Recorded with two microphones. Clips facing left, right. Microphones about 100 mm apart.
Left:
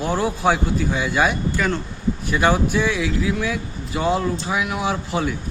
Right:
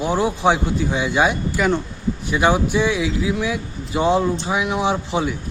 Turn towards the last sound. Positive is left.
turn(degrees=-15)  # may be behind; listen again after turning